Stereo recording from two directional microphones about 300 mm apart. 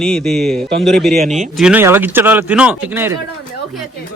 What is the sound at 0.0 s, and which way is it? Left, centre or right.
A man's voice, centre.